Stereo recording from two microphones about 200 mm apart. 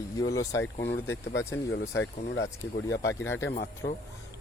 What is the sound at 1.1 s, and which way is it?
Speech, 65° left (ahead or behind).